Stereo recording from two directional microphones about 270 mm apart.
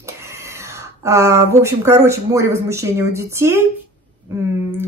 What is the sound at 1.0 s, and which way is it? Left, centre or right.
Speech, centre.